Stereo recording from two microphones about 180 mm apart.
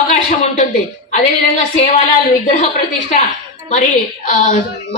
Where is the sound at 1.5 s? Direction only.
40° left (ahead or behind).